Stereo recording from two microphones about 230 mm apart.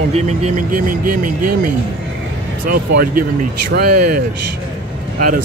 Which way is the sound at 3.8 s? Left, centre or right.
Right.